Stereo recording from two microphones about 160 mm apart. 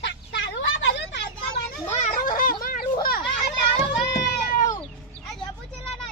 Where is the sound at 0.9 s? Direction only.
90° left.